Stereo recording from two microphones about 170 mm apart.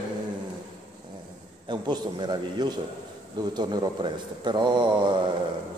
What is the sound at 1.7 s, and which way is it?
A man's voice, 25° right (ahead or behind).